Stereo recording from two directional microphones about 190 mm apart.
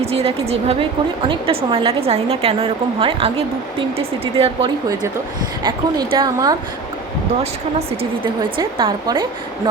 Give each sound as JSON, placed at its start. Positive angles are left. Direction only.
{"t": 0.0, "sound": "a woman's voice", "side_deg": -30}
{"t": 7.8, "sound": "a woman's voice", "side_deg": -25}